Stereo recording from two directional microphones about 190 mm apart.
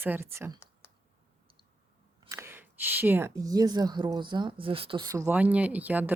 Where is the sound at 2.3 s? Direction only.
10° right (ahead or behind).